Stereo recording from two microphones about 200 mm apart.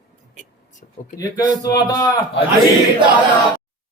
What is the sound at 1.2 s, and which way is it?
A man's voice, 20° left (ahead or behind).